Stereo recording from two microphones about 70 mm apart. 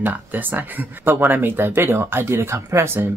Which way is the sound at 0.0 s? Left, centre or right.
Right.